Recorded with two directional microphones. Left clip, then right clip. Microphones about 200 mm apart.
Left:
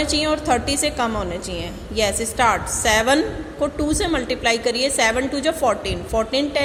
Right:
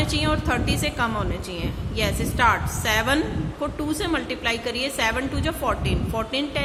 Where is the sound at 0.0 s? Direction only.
20° left (ahead or behind).